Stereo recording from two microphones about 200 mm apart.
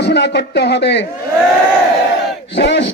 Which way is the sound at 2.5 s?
60° left (ahead or behind).